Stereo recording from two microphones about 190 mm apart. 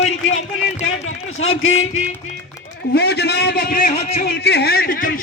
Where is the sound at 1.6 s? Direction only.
90° left.